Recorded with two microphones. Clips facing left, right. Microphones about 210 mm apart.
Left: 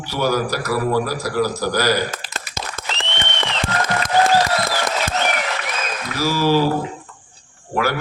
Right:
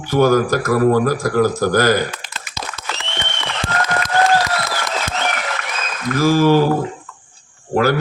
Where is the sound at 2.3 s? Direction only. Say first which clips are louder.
Left 1 dB; 50° left (ahead or behind).